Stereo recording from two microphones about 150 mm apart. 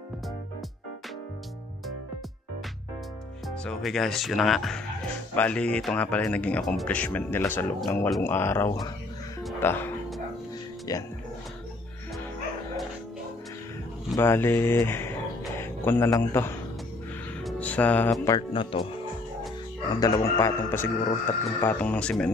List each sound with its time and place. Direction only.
3.4 s speech: centre (ahead or behind)
10.9 s speech: 25° left (ahead or behind)
14.1 s speech: 15° left (ahead or behind)
17.4 s music: 5° left (ahead or behind)
18.5 s speech: 35° left (ahead or behind)
19.9 s speech: 25° left (ahead or behind); by 22.3 s 5° left (ahead or behind)